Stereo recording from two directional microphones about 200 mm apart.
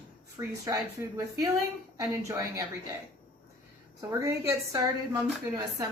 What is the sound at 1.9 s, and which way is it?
Speech, 15° right (ahead or behind).